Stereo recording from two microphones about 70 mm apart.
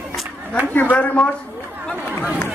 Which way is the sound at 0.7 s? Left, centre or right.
Left.